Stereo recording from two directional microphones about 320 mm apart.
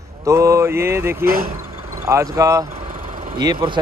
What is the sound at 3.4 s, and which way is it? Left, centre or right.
Speech, centre.